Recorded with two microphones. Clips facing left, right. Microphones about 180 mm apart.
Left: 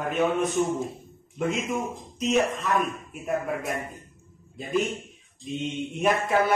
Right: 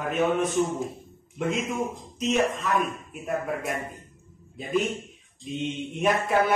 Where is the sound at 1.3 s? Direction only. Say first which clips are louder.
Even; centre (ahead or behind).